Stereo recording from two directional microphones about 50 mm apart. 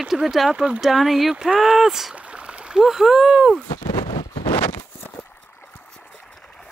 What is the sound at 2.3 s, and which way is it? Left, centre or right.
Stream, right.